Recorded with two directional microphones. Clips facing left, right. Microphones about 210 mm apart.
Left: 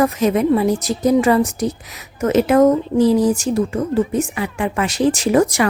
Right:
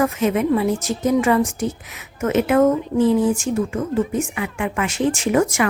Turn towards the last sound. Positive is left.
turn(degrees=35)  # may be behind; listen again after turning